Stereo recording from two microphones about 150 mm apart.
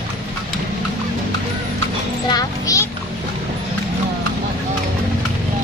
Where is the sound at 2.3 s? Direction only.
25° left (ahead or behind).